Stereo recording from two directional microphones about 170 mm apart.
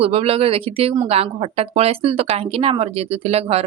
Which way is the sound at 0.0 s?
35° right (ahead or behind).